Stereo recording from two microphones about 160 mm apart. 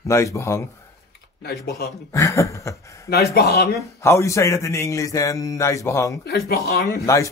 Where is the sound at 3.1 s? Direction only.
85° left.